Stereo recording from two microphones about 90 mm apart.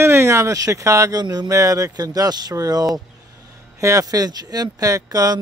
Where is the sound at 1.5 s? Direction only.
35° right (ahead or behind).